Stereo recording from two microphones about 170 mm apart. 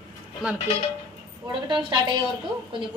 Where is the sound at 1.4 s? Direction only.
25° right (ahead or behind).